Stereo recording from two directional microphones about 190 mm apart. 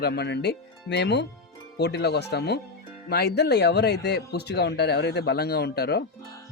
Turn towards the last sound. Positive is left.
turn(degrees=60)  # may be behind; listen again after turning